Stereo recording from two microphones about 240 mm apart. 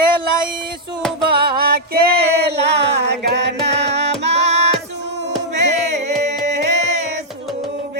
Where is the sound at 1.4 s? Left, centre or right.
Right.